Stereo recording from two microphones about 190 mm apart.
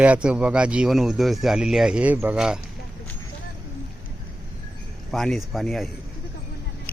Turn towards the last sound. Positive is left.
turn(degrees=0)  # may be behind; listen again after turning